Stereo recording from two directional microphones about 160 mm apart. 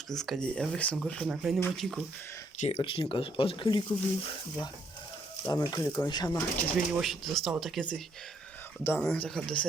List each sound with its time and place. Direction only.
0.1 s speech: 5° left (ahead or behind)
2.6 s speech: 40° left (ahead or behind)
5.5 s speech: 25° left (ahead or behind)
6.7 s speech: centre (ahead or behind)
8.8 s speech: 15° left (ahead or behind)